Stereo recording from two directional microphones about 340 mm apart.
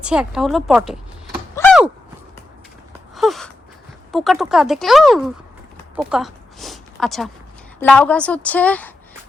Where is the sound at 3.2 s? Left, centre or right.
Centre.